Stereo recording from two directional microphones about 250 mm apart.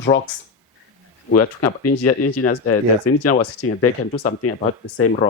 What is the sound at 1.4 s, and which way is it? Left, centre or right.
Speech, left.